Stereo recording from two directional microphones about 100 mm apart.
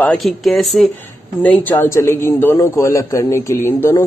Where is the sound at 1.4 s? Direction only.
15° left (ahead or behind).